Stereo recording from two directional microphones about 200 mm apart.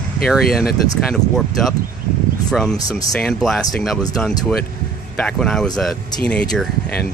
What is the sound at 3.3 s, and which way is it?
Speech, centre (ahead or behind).